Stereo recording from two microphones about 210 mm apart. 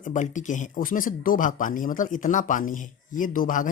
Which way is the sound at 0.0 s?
35° left (ahead or behind).